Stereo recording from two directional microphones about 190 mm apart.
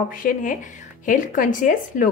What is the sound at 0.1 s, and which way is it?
A woman's voice, 45° left (ahead or behind).